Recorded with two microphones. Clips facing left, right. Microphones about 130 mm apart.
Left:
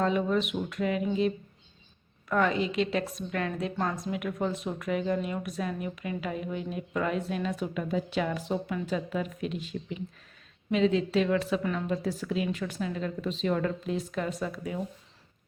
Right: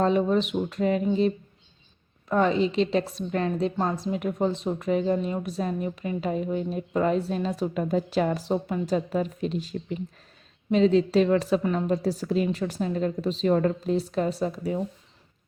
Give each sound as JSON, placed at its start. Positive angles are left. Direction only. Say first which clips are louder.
{"t": 0.0, "sound": "a woman's voice", "louder": "right 4 dB", "side_deg": -35}
{"t": 2.3, "sound": "a woman's voice", "louder": "right 4 dB", "side_deg": -25}